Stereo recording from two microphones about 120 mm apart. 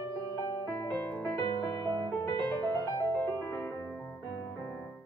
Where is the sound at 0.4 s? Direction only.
25° left (ahead or behind).